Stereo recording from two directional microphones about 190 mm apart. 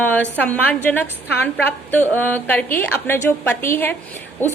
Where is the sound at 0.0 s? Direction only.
10° left (ahead or behind).